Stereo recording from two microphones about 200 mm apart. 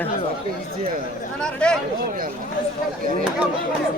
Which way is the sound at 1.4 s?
5° left (ahead or behind).